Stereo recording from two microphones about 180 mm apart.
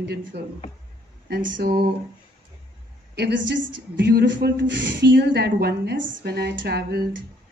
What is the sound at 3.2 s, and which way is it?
A woman's voice, 75° right (ahead or behind).